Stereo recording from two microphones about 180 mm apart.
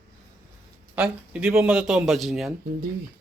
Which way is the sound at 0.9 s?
5° right (ahead or behind).